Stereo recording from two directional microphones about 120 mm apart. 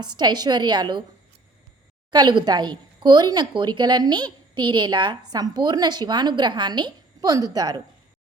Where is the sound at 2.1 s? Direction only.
35° right (ahead or behind).